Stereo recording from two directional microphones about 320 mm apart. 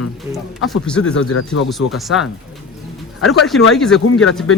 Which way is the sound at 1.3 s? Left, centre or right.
Left.